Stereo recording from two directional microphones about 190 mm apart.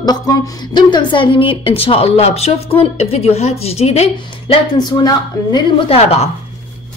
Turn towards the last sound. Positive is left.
turn(degrees=35)  # may be behind; listen again after turning